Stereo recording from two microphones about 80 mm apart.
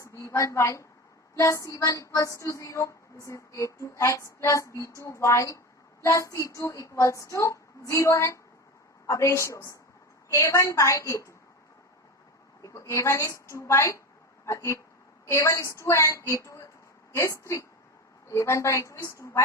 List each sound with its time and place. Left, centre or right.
0.0 s a sound: left
1.4 s female singing: left
12.6 s female singing: left
14.4 s speech: left
15.3 s female singing: left